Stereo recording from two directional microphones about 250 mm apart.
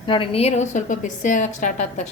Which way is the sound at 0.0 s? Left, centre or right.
Left.